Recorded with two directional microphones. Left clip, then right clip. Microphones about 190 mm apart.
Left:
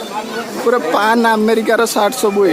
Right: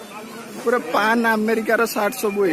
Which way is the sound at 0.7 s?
5° left (ahead or behind).